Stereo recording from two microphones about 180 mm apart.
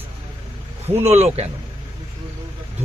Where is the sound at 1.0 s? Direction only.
35° right (ahead or behind).